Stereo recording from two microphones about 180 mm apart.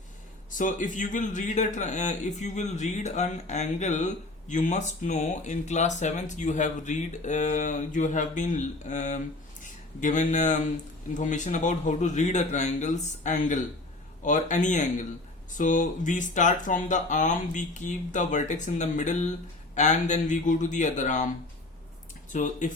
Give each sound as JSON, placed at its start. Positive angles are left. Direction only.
{"t": 0.5, "sound": "speech", "side_deg": 45}
{"t": 22.3, "sound": "speech", "side_deg": 45}